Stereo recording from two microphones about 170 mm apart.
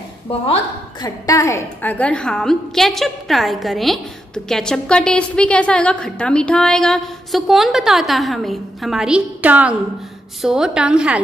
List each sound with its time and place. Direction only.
0.3 s a woman's voice: 35° left (ahead or behind)
1.0 s a woman's voice: 20° left (ahead or behind); by 11.2 s 5° right (ahead or behind)